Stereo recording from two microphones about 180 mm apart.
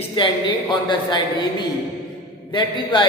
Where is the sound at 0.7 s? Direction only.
25° left (ahead or behind).